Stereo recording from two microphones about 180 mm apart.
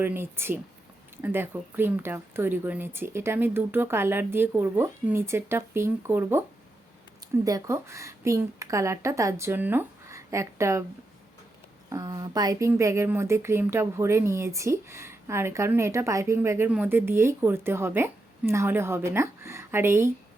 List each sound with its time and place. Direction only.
0.0 s speech: 10° right (ahead or behind)
7.4 s speech: 20° right (ahead or behind)
11.9 s speech: 20° right (ahead or behind)